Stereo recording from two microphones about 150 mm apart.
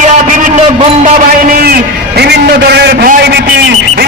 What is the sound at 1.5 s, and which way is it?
A man's voice, 85° right.